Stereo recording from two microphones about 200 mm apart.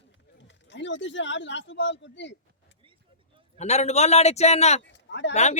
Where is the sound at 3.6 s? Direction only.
35° left (ahead or behind).